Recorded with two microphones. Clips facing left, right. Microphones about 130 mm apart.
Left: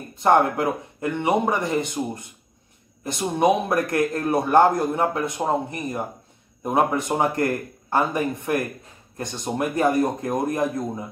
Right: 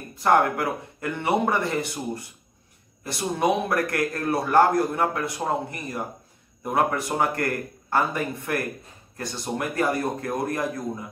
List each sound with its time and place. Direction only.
0.1 s a man's voice: 25° left (ahead or behind)